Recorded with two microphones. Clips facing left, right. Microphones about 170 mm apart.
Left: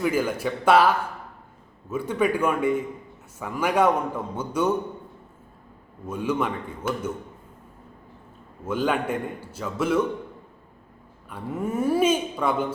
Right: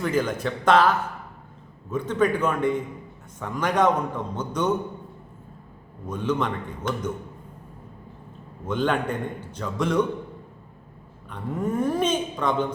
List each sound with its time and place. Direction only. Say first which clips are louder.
0.0 s a man's voice: left 1 dB; 10° left (ahead or behind)
6.1 s a man's voice: even; 10° left (ahead or behind)
8.6 s a man's voice: even; 5° left (ahead or behind)
11.3 s a man's voice: right 1 dB; 5° left (ahead or behind)